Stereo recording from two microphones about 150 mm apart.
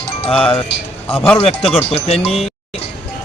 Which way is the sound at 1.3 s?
40° left (ahead or behind).